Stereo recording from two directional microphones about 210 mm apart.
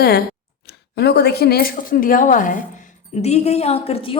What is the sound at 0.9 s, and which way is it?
A woman's voice, 50° left (ahead or behind).